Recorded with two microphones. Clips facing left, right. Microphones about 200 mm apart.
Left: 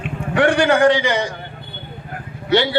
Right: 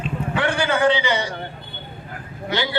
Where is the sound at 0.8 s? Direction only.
45° left (ahead or behind).